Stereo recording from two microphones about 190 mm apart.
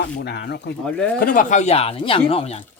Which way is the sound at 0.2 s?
60° left (ahead or behind).